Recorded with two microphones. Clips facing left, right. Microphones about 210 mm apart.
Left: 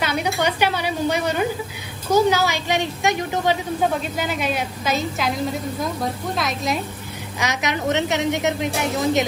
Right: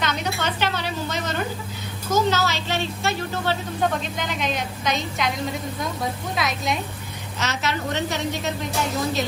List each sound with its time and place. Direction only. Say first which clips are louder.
0.0 s a woman's voice: left 4 dB; 10° left (ahead or behind)
7.3 s a woman's voice: left 2 dB; 15° left (ahead or behind)